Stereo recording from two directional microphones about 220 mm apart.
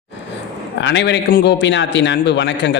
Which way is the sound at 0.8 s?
55° left (ahead or behind).